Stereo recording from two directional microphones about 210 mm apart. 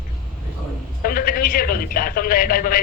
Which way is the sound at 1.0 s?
45° left (ahead or behind).